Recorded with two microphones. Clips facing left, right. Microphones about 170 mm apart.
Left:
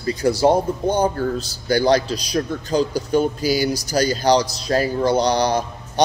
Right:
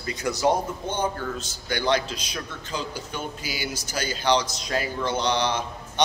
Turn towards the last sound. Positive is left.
turn(degrees=40)  # may be behind; listen again after turning